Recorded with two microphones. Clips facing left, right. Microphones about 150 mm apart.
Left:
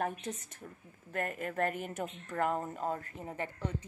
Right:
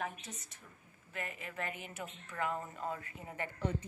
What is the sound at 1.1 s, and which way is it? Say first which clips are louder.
A woman's voice: left 8 dB; 50° left (ahead or behind).